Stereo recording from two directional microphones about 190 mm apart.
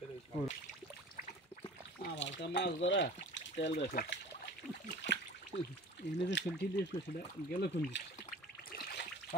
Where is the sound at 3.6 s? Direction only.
35° left (ahead or behind).